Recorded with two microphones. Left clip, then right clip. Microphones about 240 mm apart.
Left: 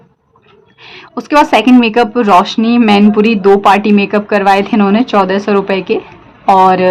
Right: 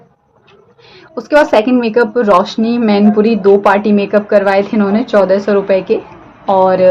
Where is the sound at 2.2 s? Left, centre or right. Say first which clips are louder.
Left 2 dB; left.